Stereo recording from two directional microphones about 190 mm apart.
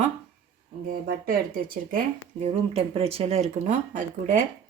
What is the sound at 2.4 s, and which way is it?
Speech, 30° right (ahead or behind).